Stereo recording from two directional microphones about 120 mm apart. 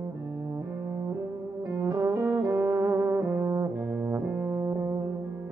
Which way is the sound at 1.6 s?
25° right (ahead or behind).